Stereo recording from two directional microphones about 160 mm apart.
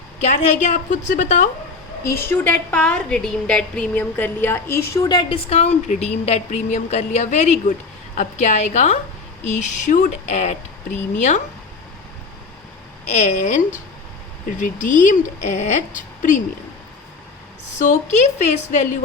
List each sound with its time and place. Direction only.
0.2 s a woman's voice: 45° left (ahead or behind)
2.0 s a woman's voice: 15° left (ahead or behind)
4.9 s a woman's voice: 25° left (ahead or behind); by 11.4 s 50° left (ahead or behind)
13.1 s a woman's voice: 45° left (ahead or behind)
17.7 s a woman's voice: 50° left (ahead or behind)